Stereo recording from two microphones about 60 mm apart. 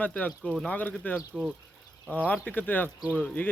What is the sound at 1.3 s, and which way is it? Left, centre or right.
Speech, centre.